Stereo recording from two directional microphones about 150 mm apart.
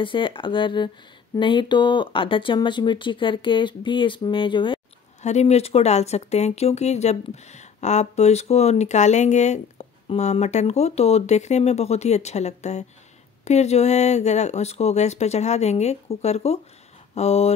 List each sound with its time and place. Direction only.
0.0 s speech: 35° left (ahead or behind)
5.2 s speech: 50° left (ahead or behind)